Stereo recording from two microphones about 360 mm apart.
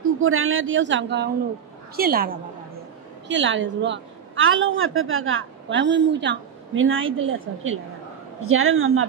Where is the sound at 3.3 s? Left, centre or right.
Right.